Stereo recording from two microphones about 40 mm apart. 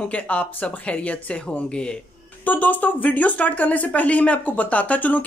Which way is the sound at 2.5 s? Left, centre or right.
Left.